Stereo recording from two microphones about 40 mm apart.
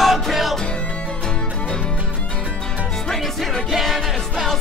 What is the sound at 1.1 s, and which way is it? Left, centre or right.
Music, left.